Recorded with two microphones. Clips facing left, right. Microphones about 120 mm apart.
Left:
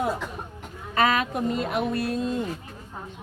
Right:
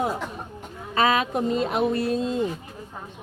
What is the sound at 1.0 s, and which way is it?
A woman's voice, 25° right (ahead or behind).